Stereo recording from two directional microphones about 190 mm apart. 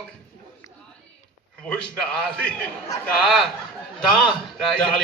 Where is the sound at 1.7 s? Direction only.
5° left (ahead or behind).